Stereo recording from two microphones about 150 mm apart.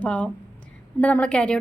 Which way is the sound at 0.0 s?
10° left (ahead or behind).